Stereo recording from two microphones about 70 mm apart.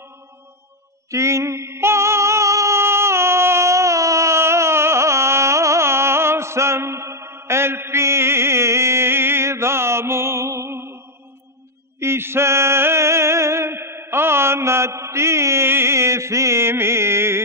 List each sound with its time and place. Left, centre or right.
1.1 s music: right
12.0 s music: right